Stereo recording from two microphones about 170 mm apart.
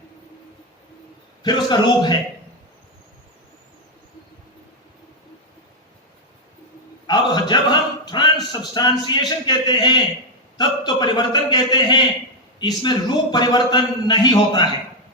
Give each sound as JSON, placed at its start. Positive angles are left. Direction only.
{"t": 1.4, "sound": "a man's voice", "side_deg": 25}
{"t": 7.1, "sound": "a sound", "side_deg": 25}
{"t": 8.7, "sound": "a man's voice", "side_deg": 25}